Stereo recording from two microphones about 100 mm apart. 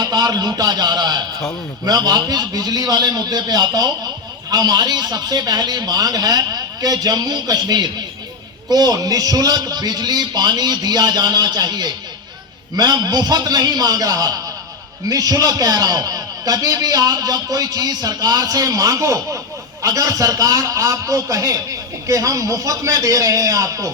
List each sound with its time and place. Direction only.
0.0 s a man's voice: 40° right (ahead or behind)